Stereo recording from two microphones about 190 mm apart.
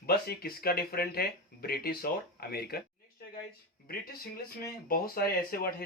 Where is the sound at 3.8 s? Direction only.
50° left (ahead or behind).